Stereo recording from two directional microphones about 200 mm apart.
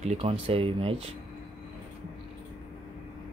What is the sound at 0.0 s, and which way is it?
Speech, 30° right (ahead or behind).